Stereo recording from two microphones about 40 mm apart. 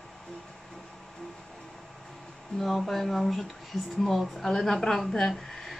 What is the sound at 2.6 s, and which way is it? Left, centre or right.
A woman's voice, centre.